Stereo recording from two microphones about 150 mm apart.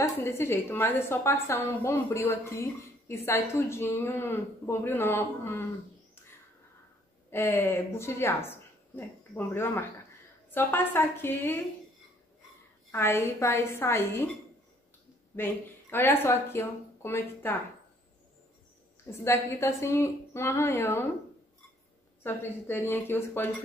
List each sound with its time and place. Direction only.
0.0 s a woman's voice: 15° left (ahead or behind)
7.2 s a woman's voice: 15° left (ahead or behind)
12.9 s a woman's voice: 20° left (ahead or behind)
15.3 s speech: 15° left (ahead or behind)
19.0 s a woman's voice: 15° left (ahead or behind)
22.2 s a woman's voice: 15° left (ahead or behind)